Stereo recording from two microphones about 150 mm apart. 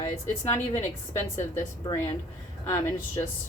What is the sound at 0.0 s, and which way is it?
Speech, 20° left (ahead or behind).